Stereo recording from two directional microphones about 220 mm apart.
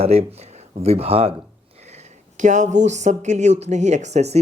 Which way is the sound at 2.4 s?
35° right (ahead or behind).